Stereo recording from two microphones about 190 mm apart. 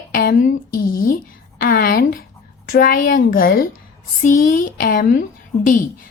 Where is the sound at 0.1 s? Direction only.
45° left (ahead or behind).